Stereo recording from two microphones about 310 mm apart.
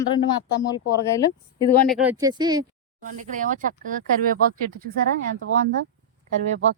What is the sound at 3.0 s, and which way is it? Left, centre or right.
Speech, right.